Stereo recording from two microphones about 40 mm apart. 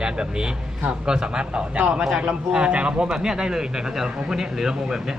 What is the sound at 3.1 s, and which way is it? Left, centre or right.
Speech, centre.